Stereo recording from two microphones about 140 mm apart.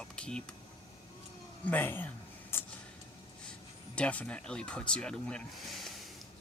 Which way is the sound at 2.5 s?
15° left (ahead or behind).